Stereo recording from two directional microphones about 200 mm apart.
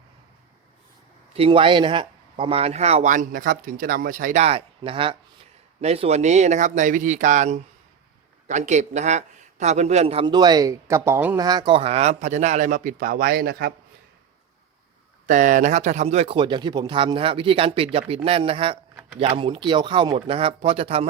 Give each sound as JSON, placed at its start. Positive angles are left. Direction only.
{"t": 1.3, "sound": "speech", "side_deg": -25}
{"t": 11.4, "sound": "speech", "side_deg": -20}
{"t": 15.3, "sound": "speech", "side_deg": -40}